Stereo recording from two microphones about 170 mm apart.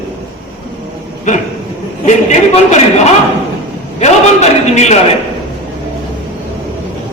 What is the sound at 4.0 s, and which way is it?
A man's voice, 40° left (ahead or behind).